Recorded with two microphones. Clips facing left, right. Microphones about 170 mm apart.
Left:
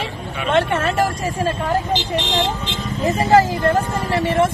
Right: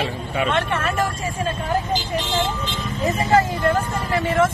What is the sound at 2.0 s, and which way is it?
Speech, 75° left (ahead or behind).